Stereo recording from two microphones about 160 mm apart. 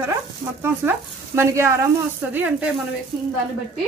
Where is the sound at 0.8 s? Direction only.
15° right (ahead or behind).